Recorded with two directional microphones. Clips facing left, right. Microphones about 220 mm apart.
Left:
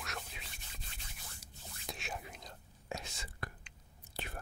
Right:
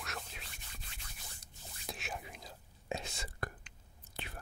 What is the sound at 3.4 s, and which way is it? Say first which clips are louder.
Whispering: right 3 dB; 45° right (ahead or behind).